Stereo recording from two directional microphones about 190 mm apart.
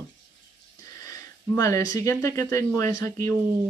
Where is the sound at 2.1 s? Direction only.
15° left (ahead or behind).